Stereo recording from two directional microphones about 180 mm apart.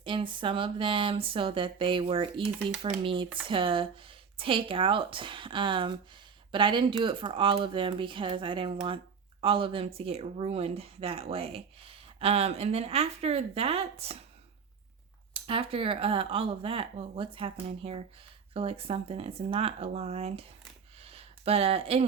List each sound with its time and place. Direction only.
0.0 s speech: 25° right (ahead or behind)
15.3 s speech: 30° right (ahead or behind)
21.0 s a sound: 35° right (ahead or behind)